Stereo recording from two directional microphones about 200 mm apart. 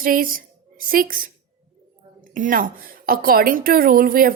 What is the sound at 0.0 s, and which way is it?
Speech, 45° right (ahead or behind).